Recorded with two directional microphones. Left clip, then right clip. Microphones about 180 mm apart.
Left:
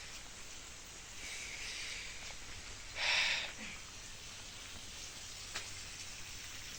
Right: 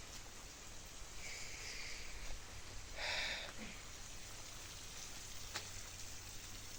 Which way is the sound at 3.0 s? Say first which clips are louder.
Left 8 dB; 5° right (ahead or behind).